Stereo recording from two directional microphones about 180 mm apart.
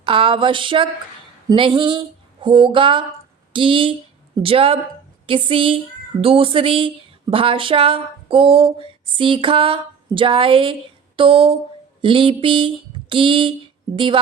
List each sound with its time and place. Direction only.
0.0 s speech: 30° right (ahead or behind)